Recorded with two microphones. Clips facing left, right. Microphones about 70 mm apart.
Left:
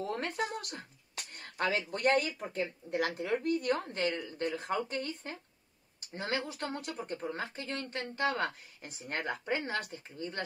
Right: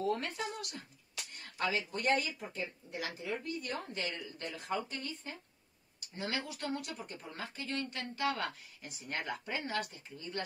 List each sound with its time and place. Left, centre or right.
0.0 s speech: left